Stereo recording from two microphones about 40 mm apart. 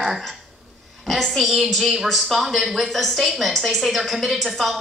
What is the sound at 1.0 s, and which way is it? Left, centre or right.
A woman's voice, centre.